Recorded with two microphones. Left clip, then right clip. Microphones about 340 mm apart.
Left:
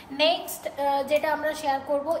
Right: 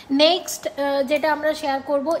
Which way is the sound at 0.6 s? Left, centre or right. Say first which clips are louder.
Right 3 dB; right.